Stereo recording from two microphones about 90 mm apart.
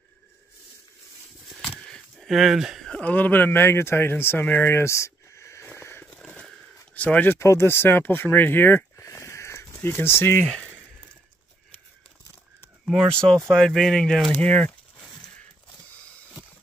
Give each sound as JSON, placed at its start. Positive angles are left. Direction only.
{"t": 1.6, "sound": "a sound", "side_deg": 5}
{"t": 2.8, "sound": "speech", "side_deg": 10}
{"t": 6.0, "sound": "a sound", "side_deg": 15}
{"t": 7.0, "sound": "speech", "side_deg": 20}
{"t": 7.3, "sound": "speech", "side_deg": 30}
{"t": 12.8, "sound": "speech", "side_deg": 5}